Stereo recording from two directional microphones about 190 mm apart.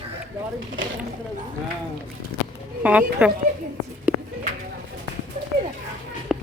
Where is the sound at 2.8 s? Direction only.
5° right (ahead or behind).